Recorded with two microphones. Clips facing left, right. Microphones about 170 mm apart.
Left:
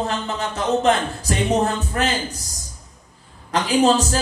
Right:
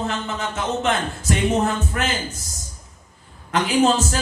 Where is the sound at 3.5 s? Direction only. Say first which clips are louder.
Left 1 dB; 35° left (ahead or behind).